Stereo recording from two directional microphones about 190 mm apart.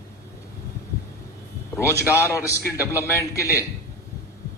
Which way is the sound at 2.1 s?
15° left (ahead or behind).